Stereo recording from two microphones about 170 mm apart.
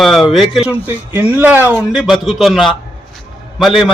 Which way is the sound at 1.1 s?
10° right (ahead or behind).